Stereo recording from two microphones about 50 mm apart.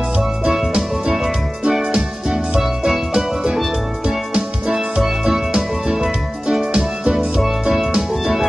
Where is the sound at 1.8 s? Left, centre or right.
Right.